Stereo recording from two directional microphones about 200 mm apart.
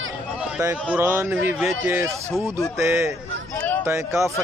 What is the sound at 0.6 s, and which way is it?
Speech, 10° right (ahead or behind).